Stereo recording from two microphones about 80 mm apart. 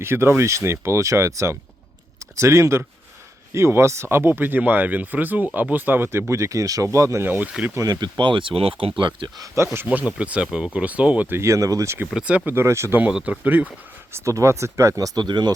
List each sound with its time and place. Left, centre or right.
0.0 s speech: right
7.3 s speech: right
7.9 s speech: right
9.0 s speech: right
9.7 s speech: right
11.3 s speech: right
12.1 s speech: centre
12.5 s speech: right
13.0 s speech: centre
14.1 s speech: right